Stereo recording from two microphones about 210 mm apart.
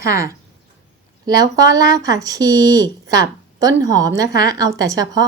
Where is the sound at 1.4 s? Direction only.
15° right (ahead or behind).